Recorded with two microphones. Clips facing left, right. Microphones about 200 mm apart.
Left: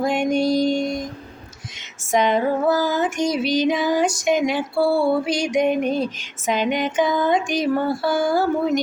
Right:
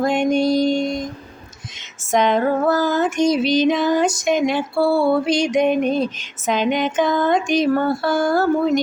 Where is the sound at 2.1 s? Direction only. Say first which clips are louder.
Right 2 dB; 10° left (ahead or behind).